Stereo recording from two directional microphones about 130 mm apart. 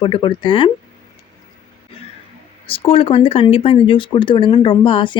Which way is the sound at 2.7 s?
45° left (ahead or behind).